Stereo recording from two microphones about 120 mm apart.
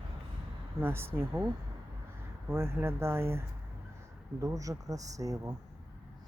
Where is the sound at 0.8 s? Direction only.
20° right (ahead or behind).